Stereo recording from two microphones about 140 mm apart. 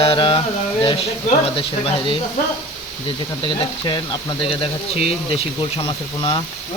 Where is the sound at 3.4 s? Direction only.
30° left (ahead or behind).